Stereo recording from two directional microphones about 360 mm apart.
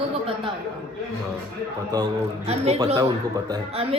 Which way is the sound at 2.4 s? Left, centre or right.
Centre.